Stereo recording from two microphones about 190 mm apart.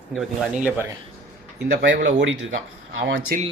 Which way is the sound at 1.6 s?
70° right (ahead or behind).